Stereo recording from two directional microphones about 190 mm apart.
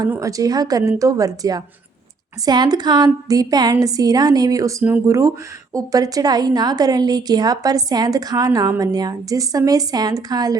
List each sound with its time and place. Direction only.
0.0 s a woman's voice: 15° right (ahead or behind)